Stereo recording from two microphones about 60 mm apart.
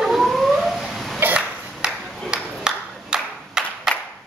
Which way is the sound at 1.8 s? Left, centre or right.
Centre.